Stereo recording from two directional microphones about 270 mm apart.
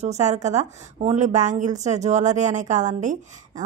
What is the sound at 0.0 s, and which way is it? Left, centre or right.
A woman's voice, right.